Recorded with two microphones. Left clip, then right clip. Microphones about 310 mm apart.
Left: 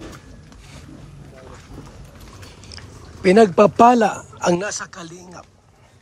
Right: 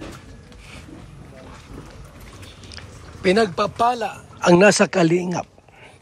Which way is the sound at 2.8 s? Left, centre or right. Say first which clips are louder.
Left 1 dB; centre.